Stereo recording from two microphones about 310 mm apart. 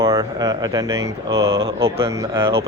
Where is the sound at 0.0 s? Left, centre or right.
Centre.